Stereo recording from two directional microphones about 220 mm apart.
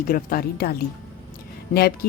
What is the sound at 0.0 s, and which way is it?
Speech, 40° left (ahead or behind).